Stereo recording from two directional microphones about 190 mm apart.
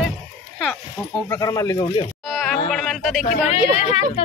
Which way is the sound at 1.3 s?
20° left (ahead or behind).